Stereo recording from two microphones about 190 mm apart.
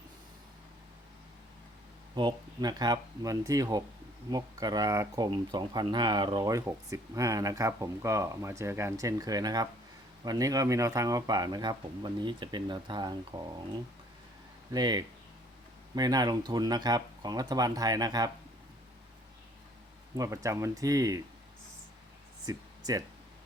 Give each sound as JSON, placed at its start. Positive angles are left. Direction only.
{"t": 2.1, "sound": "speech", "side_deg": -25}
{"t": 14.7, "sound": "speech", "side_deg": -20}
{"t": 20.1, "sound": "speech", "side_deg": -15}
{"t": 22.4, "sound": "speech", "side_deg": -20}